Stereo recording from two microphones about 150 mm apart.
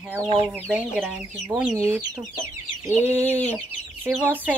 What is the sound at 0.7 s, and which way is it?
Speech, 10° right (ahead or behind).